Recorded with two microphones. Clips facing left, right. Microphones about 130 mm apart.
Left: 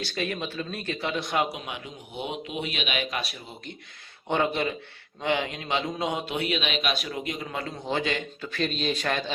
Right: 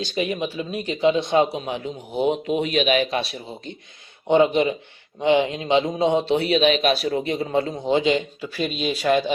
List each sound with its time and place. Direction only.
0.0 s a man's voice: 15° right (ahead or behind)